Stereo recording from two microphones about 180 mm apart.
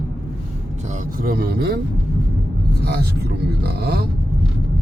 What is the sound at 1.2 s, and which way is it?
Speech, 55° right (ahead or behind).